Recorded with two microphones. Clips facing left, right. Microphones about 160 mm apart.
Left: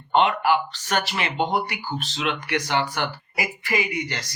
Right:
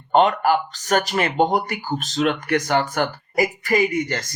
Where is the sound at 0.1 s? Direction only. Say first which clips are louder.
Right 3 dB; 40° right (ahead or behind).